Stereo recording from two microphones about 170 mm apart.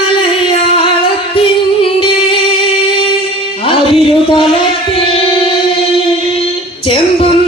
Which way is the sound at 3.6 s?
35° left (ahead or behind).